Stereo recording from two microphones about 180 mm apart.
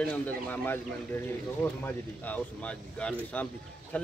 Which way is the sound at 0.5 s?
10° left (ahead or behind).